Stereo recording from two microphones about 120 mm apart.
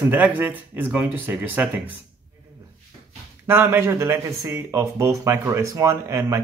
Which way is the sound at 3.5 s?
15° right (ahead or behind).